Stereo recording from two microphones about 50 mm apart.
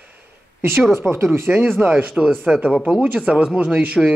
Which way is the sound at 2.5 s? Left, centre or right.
Centre.